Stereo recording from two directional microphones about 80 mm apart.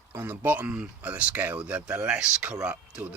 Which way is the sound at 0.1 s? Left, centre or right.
Right.